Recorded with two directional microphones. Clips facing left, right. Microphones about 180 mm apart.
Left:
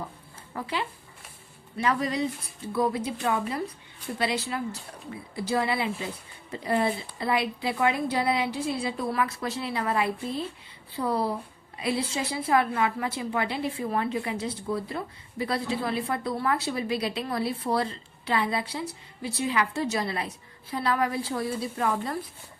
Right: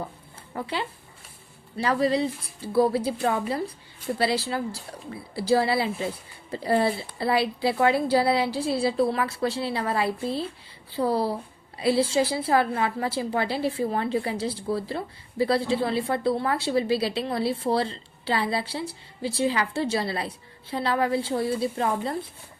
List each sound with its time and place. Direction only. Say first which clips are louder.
0.5 s a woman's voice: right 1 dB; 30° right (ahead or behind)